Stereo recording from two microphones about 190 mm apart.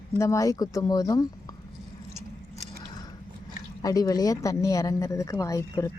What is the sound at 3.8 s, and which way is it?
Speech, 20° left (ahead or behind).